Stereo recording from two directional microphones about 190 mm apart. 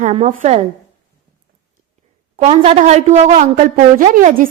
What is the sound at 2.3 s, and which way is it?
A woman's voice, 30° right (ahead or behind).